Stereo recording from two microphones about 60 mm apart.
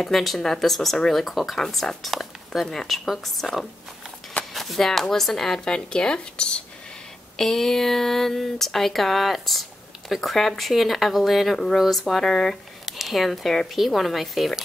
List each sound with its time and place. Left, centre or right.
0.0 s speech: centre